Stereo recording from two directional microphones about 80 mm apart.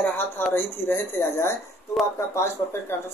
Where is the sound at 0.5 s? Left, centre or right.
Left.